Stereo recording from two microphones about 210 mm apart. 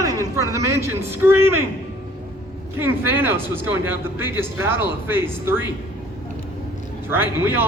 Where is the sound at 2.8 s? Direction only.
10° right (ahead or behind).